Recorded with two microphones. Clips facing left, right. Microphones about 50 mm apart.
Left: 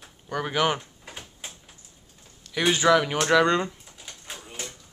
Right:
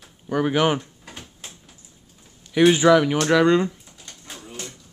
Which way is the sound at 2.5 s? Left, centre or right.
Centre.